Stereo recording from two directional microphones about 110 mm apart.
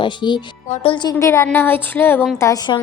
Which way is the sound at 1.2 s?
25° left (ahead or behind).